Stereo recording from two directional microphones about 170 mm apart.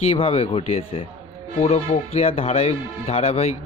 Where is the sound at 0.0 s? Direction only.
35° left (ahead or behind).